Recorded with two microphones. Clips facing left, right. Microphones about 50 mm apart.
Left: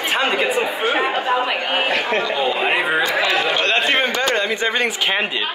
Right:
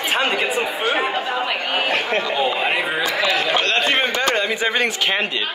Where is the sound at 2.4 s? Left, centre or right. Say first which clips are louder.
Left 1 dB; centre.